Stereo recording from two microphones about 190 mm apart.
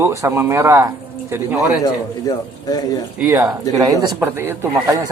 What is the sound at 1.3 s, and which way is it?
Speech, 5° right (ahead or behind).